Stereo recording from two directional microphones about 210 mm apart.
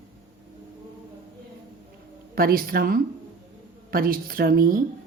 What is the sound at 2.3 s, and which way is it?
Speech, 45° right (ahead or behind).